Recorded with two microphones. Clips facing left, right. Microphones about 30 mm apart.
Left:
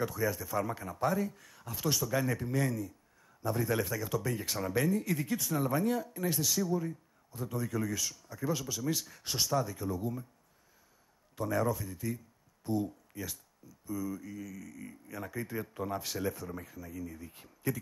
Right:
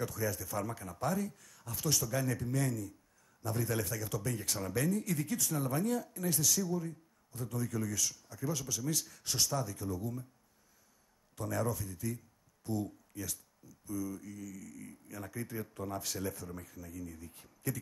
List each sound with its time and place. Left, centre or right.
0.0 s speech: centre
11.3 s speech: centre